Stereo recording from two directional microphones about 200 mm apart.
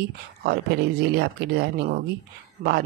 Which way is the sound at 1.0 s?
55° right (ahead or behind).